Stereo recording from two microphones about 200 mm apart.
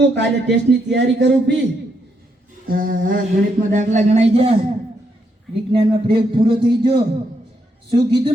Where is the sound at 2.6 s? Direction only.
45° right (ahead or behind).